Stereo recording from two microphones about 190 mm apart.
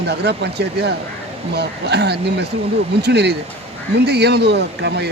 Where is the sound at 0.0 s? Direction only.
60° right (ahead or behind).